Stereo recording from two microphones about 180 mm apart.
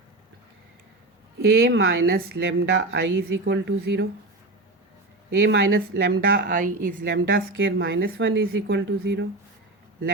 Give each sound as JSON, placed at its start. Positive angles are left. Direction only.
{"t": 1.5, "sound": "a woman's voice", "side_deg": -90}
{"t": 5.4, "sound": "a woman's voice", "side_deg": -85}
{"t": 6.5, "sound": "speech", "side_deg": -45}
{"t": 7.1, "sound": "a woman's voice", "side_deg": -75}